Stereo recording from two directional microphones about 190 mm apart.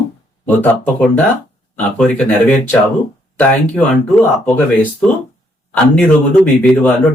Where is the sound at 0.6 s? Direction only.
10° left (ahead or behind).